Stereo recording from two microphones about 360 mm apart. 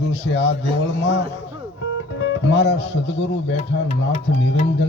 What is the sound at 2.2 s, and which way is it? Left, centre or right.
Speech, left.